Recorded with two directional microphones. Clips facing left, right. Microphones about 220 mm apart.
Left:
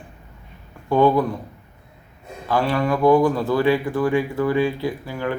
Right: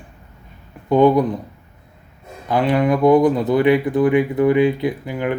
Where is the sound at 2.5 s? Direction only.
20° right (ahead or behind).